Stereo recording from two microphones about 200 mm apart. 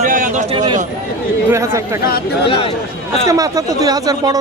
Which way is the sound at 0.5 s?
20° right (ahead or behind).